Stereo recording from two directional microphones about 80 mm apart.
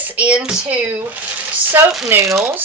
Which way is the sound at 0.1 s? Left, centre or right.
Centre.